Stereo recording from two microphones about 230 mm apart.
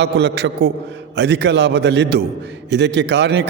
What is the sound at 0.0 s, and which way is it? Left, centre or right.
A man's voice, right.